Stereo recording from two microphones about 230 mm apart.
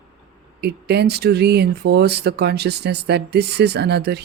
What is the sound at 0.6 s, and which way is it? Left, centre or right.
Speech, right.